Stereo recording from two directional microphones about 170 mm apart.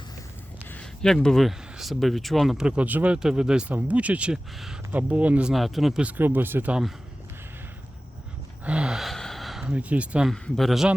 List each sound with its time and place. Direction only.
0.7 s speech: 5° left (ahead or behind)
8.6 s gasp: 5° right (ahead or behind)
10.3 s speech: 5° left (ahead or behind)